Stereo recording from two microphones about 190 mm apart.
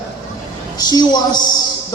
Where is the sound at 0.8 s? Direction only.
20° left (ahead or behind).